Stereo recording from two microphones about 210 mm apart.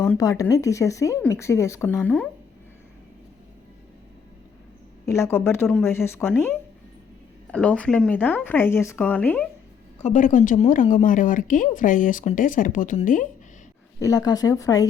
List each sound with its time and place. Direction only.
0.2 s speech: 15° left (ahead or behind)
5.0 s speech: 15° left (ahead or behind)
10.0 s speech: 35° left (ahead or behind)
14.0 s speech: 15° left (ahead or behind)